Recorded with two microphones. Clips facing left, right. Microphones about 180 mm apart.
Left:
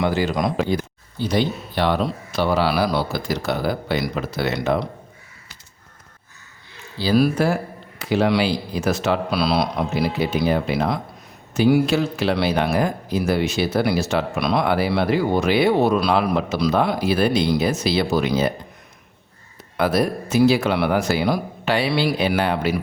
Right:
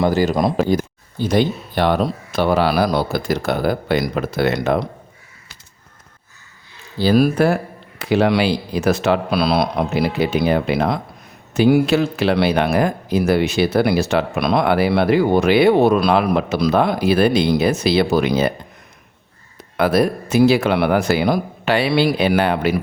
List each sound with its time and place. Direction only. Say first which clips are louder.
0.0 s speech: right 4 dB; 40° right (ahead or behind)
7.0 s a man's voice: right 3 dB; 50° right (ahead or behind)
19.7 s a man's voice: right 3 dB; 60° right (ahead or behind)